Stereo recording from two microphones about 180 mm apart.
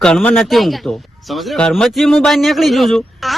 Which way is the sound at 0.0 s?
5° left (ahead or behind).